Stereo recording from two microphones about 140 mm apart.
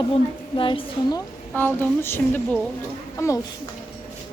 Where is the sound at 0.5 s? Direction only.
35° left (ahead or behind).